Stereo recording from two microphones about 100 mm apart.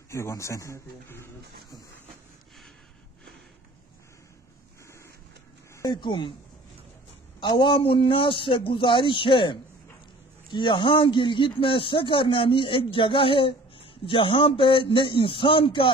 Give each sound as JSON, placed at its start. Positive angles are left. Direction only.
{"t": 0.1, "sound": "a man's voice", "side_deg": 30}
{"t": 5.9, "sound": "speech", "side_deg": 50}
{"t": 7.3, "sound": "speech", "side_deg": 50}